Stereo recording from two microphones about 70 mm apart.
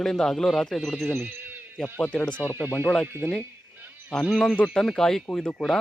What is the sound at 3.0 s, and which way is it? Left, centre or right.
Speech, right.